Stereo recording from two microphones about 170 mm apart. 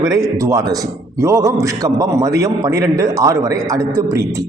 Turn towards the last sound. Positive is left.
turn(degrees=-15)  # may be behind; listen again after turning